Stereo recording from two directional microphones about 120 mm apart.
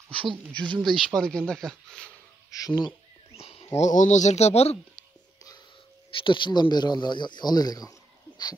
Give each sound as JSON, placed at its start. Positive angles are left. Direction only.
{"t": 0.1, "sound": "speech", "side_deg": -45}
{"t": 0.7, "sound": "speech", "side_deg": 0}
{"t": 2.5, "sound": "speech", "side_deg": 35}
{"t": 3.3, "sound": "a sound", "side_deg": 55}
{"t": 3.7, "sound": "speech", "side_deg": 85}
{"t": 6.1, "sound": "speech", "side_deg": 45}